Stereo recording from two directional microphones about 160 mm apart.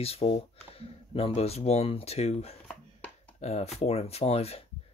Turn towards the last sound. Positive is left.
turn(degrees=40)  # may be behind; listen again after turning